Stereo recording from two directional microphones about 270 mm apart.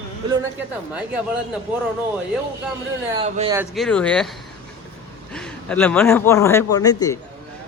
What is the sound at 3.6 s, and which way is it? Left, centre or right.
Speech, centre.